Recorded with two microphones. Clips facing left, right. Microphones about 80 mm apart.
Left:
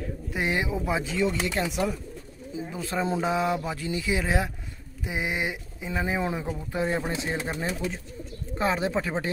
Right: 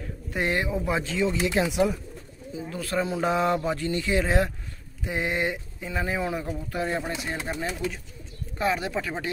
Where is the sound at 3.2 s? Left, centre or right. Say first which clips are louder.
Right 2 dB; centre.